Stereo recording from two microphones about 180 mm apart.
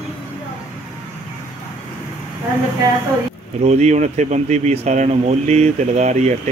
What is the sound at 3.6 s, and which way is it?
Speech, 40° right (ahead or behind).